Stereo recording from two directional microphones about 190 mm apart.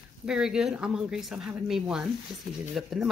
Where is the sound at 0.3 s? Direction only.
5° right (ahead or behind).